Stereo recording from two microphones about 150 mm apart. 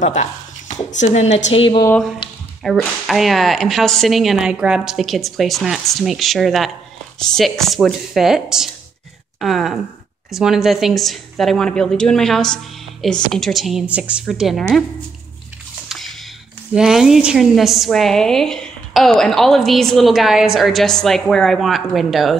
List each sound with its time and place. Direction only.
0.0 s a woman's voice: 55° left (ahead or behind)
2.2 s squish: 35° left (ahead or behind)
2.6 s a woman's voice: centre (ahead or behind)
15.9 s a sound: centre (ahead or behind)
16.7 s a woman's voice: 5° right (ahead or behind)